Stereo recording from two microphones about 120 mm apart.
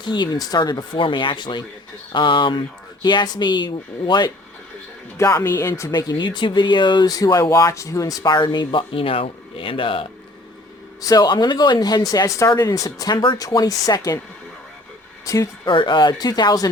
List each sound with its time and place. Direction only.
0.0 s speech: 40° left (ahead or behind)
5.1 s speech: 25° left (ahead or behind); by 10.1 s 45° left (ahead or behind)
11.0 s speech: 30° left (ahead or behind)
15.2 s speech: 25° left (ahead or behind)
15.6 s speech: 45° left (ahead or behind)